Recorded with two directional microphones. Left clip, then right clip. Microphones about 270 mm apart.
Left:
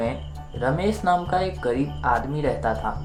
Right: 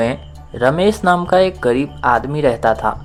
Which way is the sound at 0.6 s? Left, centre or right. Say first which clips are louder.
Right 9 dB; right.